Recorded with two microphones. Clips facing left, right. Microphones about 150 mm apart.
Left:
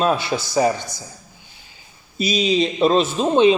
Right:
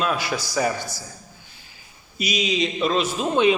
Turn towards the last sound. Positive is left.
turn(degrees=25)  # may be behind; listen again after turning